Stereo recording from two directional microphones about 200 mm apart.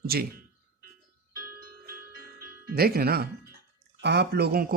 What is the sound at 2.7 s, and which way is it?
Speech, 50° right (ahead or behind).